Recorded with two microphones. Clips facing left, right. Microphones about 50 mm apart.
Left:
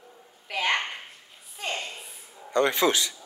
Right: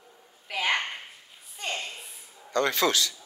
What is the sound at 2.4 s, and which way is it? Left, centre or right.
Speech, centre.